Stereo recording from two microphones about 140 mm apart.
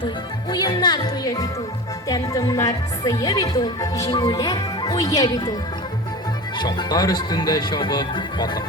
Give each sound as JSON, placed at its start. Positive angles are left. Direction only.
{"t": 0.5, "sound": "speech", "side_deg": 30}
{"t": 6.6, "sound": "speech", "side_deg": 30}